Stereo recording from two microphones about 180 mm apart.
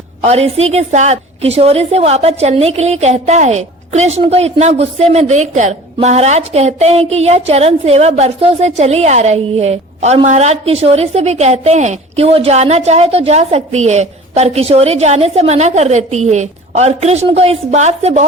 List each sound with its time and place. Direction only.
0.2 s a woman's voice: 35° right (ahead or behind)